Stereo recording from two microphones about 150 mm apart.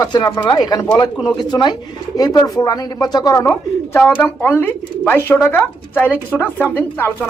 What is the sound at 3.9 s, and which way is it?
Speech, 10° left (ahead or behind).